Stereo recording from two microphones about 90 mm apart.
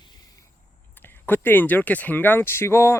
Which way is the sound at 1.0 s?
20° left (ahead or behind).